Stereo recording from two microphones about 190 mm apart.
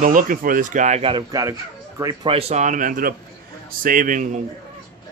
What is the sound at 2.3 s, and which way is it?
Speech, 35° right (ahead or behind).